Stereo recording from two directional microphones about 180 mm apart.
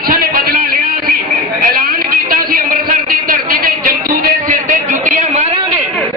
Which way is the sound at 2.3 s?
55° right (ahead or behind).